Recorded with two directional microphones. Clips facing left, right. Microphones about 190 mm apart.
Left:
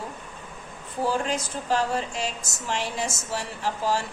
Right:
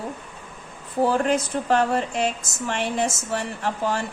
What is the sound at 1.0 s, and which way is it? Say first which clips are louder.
A woman's voice: right 6 dB; 60° right (ahead or behind).